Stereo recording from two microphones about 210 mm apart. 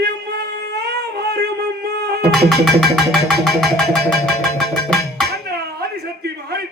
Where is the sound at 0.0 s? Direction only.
50° right (ahead or behind).